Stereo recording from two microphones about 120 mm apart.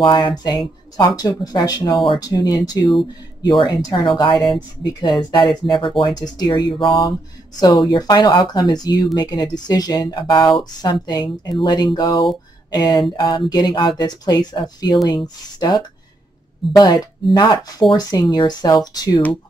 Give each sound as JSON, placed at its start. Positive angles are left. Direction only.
{"t": 0.0, "sound": "speech", "side_deg": 40}
{"t": 5.7, "sound": "speech", "side_deg": 45}